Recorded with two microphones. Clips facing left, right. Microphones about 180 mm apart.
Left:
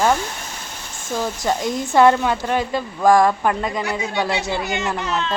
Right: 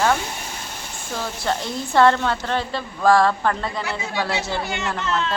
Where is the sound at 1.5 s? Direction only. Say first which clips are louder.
Left 3 dB; 15° left (ahead or behind).